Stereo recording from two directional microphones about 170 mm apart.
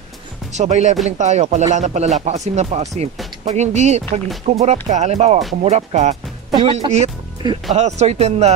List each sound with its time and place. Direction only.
0.5 s speech: 40° right (ahead or behind)